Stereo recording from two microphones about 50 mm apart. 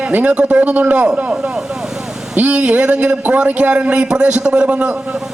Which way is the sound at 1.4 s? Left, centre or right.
Centre.